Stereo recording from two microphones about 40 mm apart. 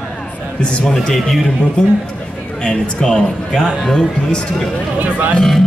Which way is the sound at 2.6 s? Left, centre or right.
Left.